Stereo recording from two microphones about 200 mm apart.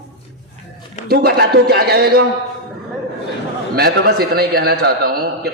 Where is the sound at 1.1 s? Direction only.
50° right (ahead or behind).